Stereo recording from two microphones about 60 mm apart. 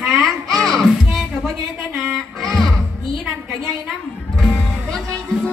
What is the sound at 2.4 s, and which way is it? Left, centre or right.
Music, centre.